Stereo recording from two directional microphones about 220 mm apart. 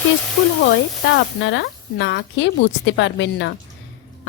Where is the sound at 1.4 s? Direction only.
55° left (ahead or behind).